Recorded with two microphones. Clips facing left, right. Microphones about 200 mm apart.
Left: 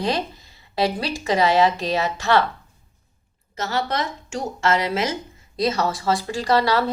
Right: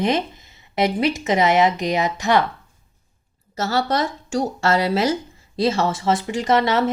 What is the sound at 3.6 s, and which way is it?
A woman's voice, 35° right (ahead or behind).